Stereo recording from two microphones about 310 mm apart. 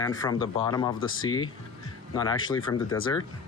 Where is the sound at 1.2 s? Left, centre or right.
Left.